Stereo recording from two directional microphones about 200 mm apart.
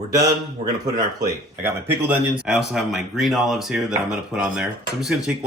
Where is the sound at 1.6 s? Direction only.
10° right (ahead or behind).